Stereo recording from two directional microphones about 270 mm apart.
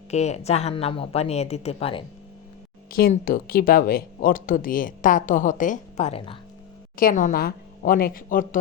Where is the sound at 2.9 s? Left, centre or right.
Left.